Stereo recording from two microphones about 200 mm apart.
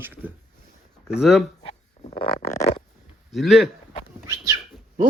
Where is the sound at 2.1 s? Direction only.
50° left (ahead or behind).